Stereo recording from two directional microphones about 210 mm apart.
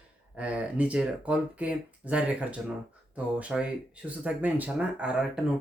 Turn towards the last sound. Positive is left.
turn(degrees=-5)  # may be behind; listen again after turning